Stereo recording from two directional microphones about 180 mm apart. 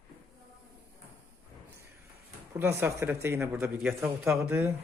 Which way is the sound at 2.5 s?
15° right (ahead or behind).